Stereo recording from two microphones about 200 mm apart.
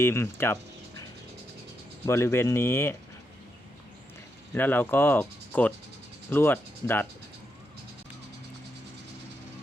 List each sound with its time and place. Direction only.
0.0 s speech: 10° left (ahead or behind)
2.0 s speech: 15° left (ahead or behind)
4.5 s speech: 10° left (ahead or behind)